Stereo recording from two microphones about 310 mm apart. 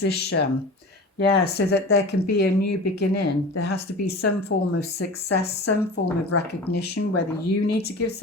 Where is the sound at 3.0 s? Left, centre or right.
Left.